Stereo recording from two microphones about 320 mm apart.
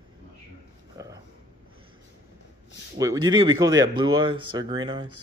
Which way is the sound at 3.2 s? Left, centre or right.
Right.